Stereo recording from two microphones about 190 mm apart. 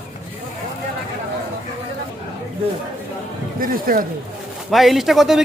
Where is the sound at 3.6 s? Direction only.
50° right (ahead or behind).